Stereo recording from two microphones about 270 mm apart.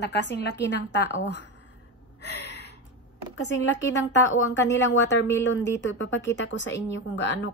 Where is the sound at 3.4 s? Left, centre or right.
Left.